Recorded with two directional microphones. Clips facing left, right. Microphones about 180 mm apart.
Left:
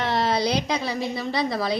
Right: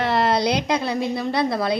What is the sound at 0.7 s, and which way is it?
A woman's voice, 55° right (ahead or behind).